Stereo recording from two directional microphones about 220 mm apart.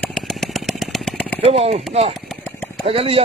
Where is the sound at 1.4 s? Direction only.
30° right (ahead or behind).